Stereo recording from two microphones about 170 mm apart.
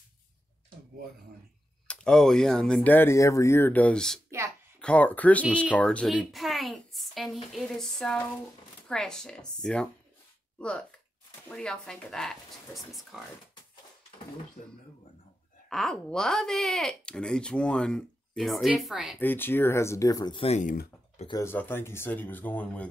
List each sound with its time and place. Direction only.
1.9 s a woman's voice: 5° left (ahead or behind)
14.6 s speech: 40° left (ahead or behind)
15.7 s speech: 5° left (ahead or behind)
19.1 s speech: 10° left (ahead or behind); by 20.7 s 40° left (ahead or behind)
21.3 s speech: 15° left (ahead or behind)